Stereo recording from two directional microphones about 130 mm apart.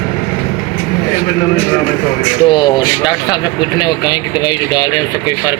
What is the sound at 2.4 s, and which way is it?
Speech, 35° left (ahead or behind).